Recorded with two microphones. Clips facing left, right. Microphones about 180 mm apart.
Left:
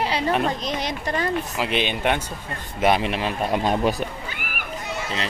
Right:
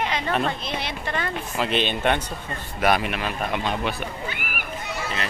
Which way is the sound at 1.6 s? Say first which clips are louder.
Right 3 dB; 10° left (ahead or behind).